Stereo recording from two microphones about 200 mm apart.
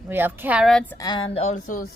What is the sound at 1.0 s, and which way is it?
Speech, 20° left (ahead or behind).